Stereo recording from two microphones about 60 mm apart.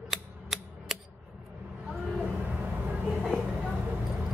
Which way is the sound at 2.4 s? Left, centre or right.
Right.